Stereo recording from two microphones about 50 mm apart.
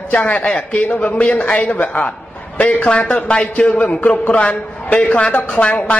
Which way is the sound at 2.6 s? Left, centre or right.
Centre.